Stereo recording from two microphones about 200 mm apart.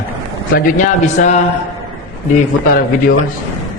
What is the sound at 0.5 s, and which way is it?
Speech, 40° left (ahead or behind).